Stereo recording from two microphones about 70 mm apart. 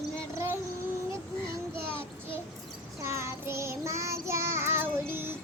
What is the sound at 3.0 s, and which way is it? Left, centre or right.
Child singing, right.